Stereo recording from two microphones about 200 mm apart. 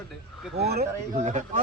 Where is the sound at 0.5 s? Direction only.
50° right (ahead or behind).